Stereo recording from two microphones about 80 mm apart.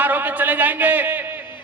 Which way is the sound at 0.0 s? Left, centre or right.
Right.